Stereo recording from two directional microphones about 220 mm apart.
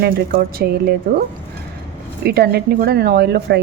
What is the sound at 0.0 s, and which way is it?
Speech, 45° right (ahead or behind).